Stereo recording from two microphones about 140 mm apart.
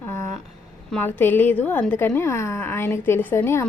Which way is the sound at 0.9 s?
15° left (ahead or behind).